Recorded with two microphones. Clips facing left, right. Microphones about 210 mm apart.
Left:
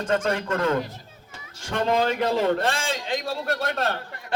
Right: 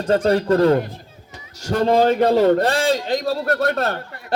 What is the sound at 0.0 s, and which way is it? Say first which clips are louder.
A man's voice: right 7 dB; 35° right (ahead or behind).